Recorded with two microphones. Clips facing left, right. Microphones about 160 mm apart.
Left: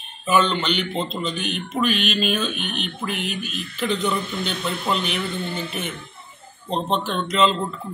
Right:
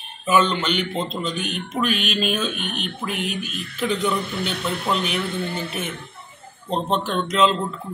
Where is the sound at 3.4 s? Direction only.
50° right (ahead or behind).